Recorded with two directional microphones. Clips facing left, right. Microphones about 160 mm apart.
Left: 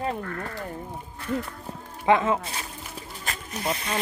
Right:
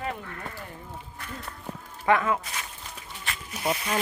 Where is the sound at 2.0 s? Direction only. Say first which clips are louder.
Left 2 dB; 25° left (ahead or behind); by 3.6 s 40° left (ahead or behind).